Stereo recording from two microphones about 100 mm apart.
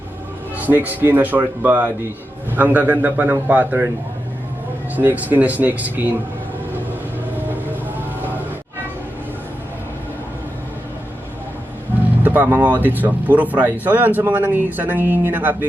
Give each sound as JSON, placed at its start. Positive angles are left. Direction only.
{"t": 0.5, "sound": "speech", "side_deg": -20}
{"t": 4.9, "sound": "speech", "side_deg": -15}
{"t": 12.2, "sound": "speech", "side_deg": -20}